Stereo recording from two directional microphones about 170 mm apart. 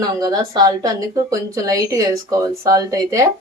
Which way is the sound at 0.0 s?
20° right (ahead or behind).